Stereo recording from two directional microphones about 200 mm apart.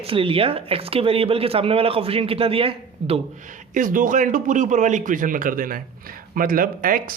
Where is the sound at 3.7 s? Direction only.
40° right (ahead or behind).